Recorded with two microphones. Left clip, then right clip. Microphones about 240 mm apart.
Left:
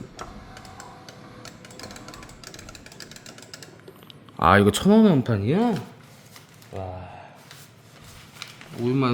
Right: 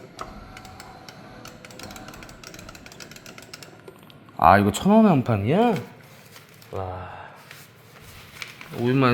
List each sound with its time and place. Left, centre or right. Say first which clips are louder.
4.4 s speech: right 1 dB; left
5.2 s speech: right 3 dB; centre
8.8 s speech: right 2 dB; centre